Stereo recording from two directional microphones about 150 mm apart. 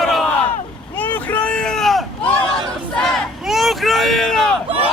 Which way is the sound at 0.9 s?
10° left (ahead or behind).